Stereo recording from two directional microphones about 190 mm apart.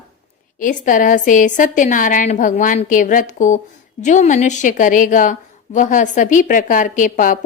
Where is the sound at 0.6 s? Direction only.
45° left (ahead or behind).